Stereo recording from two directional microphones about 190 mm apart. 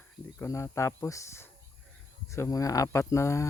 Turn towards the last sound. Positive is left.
turn(degrees=15)  # may be behind; listen again after turning